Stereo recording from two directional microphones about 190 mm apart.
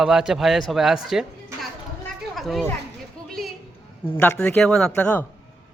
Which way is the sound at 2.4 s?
Centre (ahead or behind).